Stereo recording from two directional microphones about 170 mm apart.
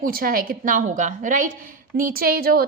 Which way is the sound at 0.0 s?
60° right (ahead or behind).